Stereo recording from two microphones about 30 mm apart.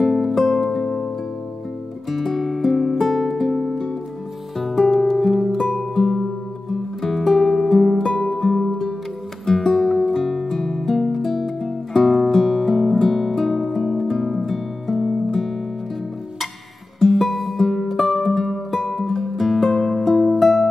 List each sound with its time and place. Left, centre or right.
0.0 s music: centre
0.8 s music: centre
2.0 s music: centre
4.8 s music: centre
5.1 s music: centre
6.7 s music: centre
12.3 s guitar: centre
13.0 s music: centre
15.0 s music: centre
17.1 s music: centre